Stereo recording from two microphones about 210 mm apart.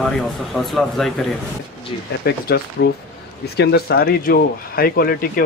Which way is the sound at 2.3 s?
50° left (ahead or behind).